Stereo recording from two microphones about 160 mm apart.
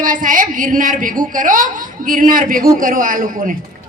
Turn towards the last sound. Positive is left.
turn(degrees=-60)  # may be behind; listen again after turning